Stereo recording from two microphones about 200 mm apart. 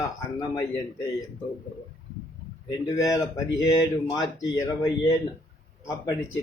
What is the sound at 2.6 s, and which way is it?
A man's voice, 15° left (ahead or behind).